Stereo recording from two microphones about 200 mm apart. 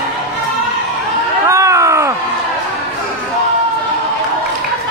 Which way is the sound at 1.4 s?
15° right (ahead or behind).